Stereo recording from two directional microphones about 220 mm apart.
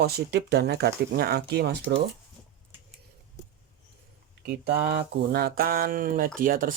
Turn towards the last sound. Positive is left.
turn(degrees=-40)  # may be behind; listen again after turning